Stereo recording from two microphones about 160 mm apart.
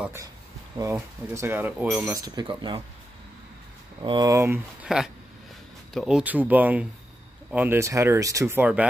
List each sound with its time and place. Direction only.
0.0 s speech: 15° right (ahead or behind)
2.0 s speech: 20° right (ahead or behind)
4.0 s speech: 25° right (ahead or behind)
4.8 s speech: 5° right (ahead or behind)